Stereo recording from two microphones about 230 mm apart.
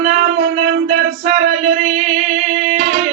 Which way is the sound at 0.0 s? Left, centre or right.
Right.